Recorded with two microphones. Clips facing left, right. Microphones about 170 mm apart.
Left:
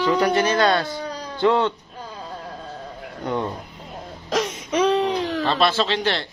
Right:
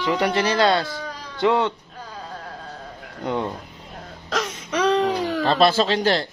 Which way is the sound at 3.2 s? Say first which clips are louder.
Even; 15° right (ahead or behind).